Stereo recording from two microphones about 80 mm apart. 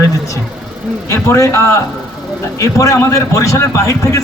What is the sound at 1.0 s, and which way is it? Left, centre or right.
A man's voice, left.